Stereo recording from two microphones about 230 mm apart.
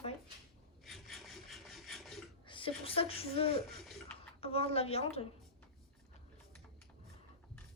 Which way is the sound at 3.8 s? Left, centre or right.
Centre.